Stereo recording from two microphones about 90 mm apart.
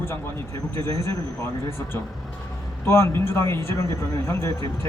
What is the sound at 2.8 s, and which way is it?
Speech, 30° left (ahead or behind).